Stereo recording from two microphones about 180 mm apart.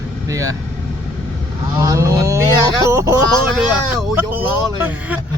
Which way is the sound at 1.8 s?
15° right (ahead or behind).